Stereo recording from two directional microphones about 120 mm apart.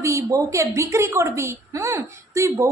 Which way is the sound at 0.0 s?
25° right (ahead or behind).